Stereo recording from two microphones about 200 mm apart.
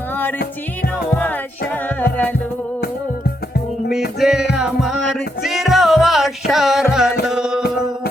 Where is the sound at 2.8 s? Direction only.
50° left (ahead or behind).